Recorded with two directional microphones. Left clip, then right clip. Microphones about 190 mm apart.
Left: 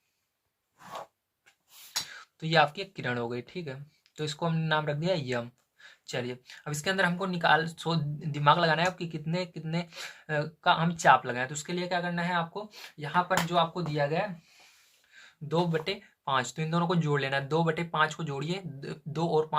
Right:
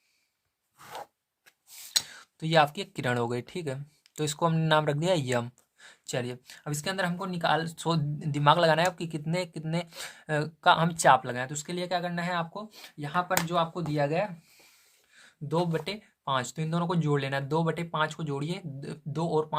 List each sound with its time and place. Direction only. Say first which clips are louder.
2.0 s speech: right 1 dB; 35° right (ahead or behind)